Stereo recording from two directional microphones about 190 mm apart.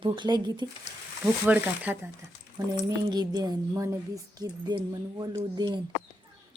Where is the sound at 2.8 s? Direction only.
20° right (ahead or behind).